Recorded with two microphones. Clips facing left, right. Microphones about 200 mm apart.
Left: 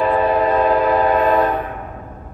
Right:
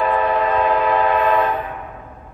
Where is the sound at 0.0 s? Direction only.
35° left (ahead or behind).